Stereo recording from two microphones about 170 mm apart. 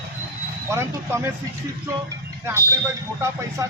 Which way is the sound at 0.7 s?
15° right (ahead or behind).